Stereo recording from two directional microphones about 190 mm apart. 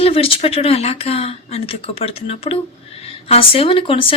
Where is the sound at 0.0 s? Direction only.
30° left (ahead or behind).